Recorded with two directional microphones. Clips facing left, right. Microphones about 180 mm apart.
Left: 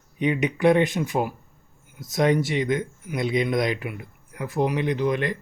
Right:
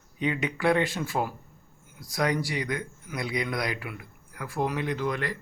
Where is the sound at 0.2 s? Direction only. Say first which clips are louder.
Left 6 dB; 20° left (ahead or behind).